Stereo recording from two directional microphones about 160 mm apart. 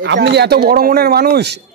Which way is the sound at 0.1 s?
90° right.